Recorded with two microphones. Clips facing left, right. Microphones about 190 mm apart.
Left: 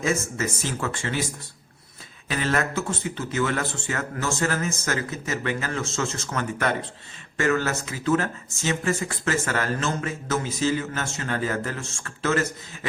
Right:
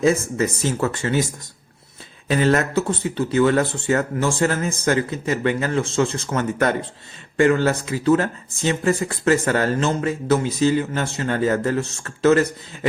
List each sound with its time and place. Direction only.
0.0 s speech: 35° right (ahead or behind)
2.3 s speech: 35° right (ahead or behind)